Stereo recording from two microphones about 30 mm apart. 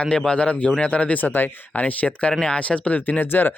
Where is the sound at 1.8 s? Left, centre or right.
Left.